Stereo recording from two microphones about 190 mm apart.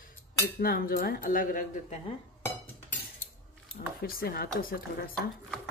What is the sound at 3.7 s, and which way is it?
Speech, 50° left (ahead or behind).